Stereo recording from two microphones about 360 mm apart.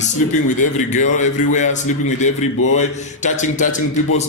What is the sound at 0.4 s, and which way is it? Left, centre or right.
A man's voice, left.